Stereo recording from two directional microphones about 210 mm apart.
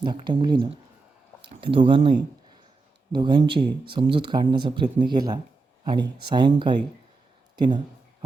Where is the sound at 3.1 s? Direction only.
20° right (ahead or behind).